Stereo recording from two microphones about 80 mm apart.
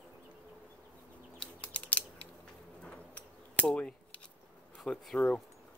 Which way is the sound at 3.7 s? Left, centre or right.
Centre.